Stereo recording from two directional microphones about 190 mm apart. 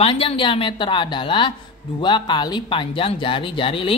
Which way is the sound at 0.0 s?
30° left (ahead or behind).